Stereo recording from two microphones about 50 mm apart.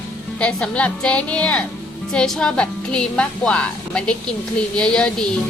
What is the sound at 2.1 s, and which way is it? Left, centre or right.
A woman's voice, centre.